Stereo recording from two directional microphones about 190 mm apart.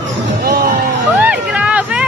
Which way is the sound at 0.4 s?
55° right (ahead or behind).